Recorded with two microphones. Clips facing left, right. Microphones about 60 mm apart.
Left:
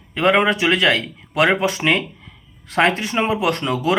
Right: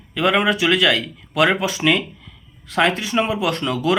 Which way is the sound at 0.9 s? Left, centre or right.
Left.